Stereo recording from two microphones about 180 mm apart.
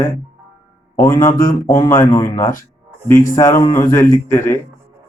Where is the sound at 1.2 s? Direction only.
45° left (ahead or behind).